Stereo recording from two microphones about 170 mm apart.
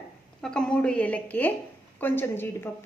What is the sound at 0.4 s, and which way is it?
A woman's voice, 5° left (ahead or behind).